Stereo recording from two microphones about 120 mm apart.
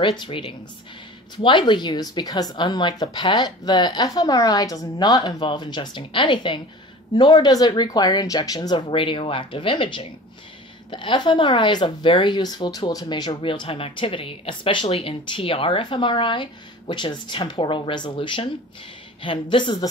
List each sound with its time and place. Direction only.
0.0 s a woman's voice: 45° left (ahead or behind)